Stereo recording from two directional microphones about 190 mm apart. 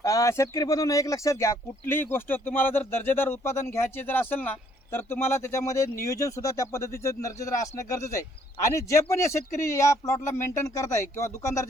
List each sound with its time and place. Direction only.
0.0 s speech: 15° left (ahead or behind)